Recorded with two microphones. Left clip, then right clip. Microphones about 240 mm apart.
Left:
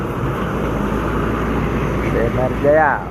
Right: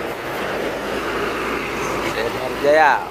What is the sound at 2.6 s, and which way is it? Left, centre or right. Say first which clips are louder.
Speech: right 1 dB; right.